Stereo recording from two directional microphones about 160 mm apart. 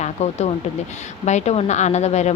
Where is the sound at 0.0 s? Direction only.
45° left (ahead or behind).